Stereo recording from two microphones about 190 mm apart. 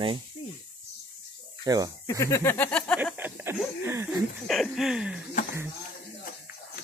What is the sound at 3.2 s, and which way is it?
Chuckle, 5° right (ahead or behind).